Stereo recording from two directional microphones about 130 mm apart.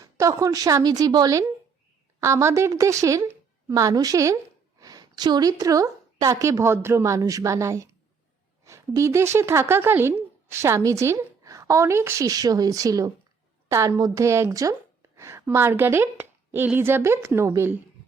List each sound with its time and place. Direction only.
0.0 s a woman's voice: 25° right (ahead or behind)